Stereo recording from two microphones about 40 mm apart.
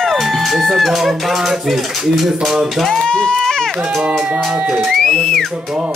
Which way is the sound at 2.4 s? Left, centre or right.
Centre.